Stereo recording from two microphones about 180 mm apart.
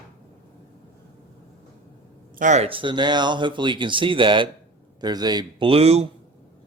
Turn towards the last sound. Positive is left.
turn(degrees=-35)  # may be behind; listen again after turning